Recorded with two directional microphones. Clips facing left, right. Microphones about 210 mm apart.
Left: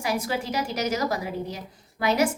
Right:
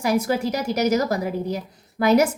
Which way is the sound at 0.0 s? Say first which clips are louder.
Right 6 dB; 40° right (ahead or behind).